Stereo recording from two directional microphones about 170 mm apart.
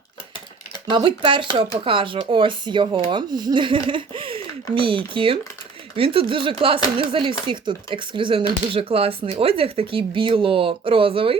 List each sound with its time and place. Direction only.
0.9 s speech: 30° right (ahead or behind)